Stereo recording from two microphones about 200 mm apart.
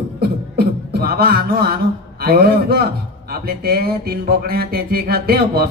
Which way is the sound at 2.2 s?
50° right (ahead or behind).